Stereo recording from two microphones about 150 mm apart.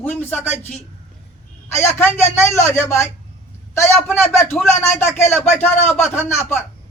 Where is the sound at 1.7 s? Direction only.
15° left (ahead or behind).